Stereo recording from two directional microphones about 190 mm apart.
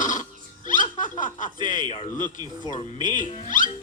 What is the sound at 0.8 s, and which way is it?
Snicker, 45° left (ahead or behind).